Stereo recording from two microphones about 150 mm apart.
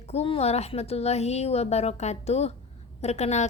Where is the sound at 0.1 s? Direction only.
45° left (ahead or behind).